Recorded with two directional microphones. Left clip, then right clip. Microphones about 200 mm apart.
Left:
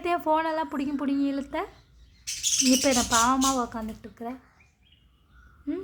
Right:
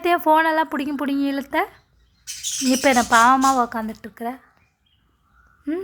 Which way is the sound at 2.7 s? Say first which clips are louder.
Right 9 dB; 20° right (ahead or behind).